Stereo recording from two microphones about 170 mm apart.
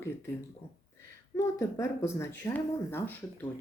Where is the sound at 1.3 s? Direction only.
15° left (ahead or behind).